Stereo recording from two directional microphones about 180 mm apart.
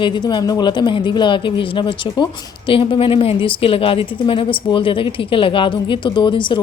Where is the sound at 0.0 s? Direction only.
25° left (ahead or behind).